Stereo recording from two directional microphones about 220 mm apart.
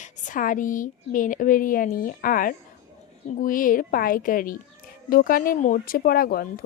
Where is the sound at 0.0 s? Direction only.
35° left (ahead or behind).